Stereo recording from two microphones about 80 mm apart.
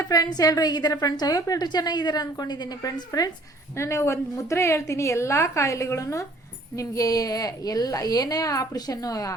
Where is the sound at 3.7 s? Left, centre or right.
Left.